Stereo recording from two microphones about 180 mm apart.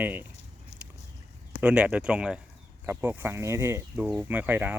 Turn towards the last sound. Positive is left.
turn(degrees=-10)  # may be behind; listen again after turning